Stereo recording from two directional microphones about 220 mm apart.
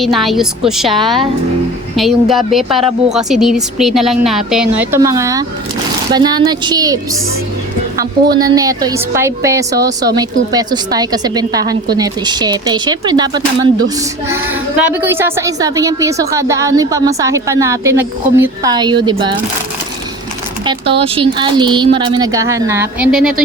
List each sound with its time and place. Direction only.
0.0 s a woman's voice: centre (ahead or behind); by 7.0 s 15° right (ahead or behind)
8.3 s a woman's voice: 15° right (ahead or behind)
20.7 s speech: 25° right (ahead or behind); by 23.3 s 5° right (ahead or behind)